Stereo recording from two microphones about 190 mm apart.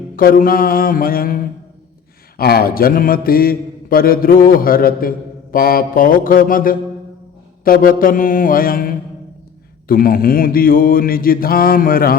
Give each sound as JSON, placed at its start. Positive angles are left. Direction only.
{"t": 0.2, "sound": "mantra", "side_deg": 50}
{"t": 2.4, "sound": "mantra", "side_deg": 55}